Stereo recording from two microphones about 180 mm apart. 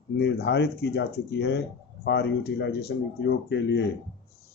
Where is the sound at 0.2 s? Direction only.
70° left (ahead or behind).